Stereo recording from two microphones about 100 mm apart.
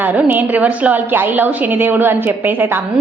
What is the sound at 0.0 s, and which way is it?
A woman's voice, 15° right (ahead or behind).